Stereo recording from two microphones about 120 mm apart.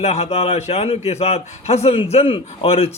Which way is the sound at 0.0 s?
60° left (ahead or behind).